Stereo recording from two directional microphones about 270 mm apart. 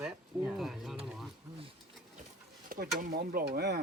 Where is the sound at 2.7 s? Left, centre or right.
Right.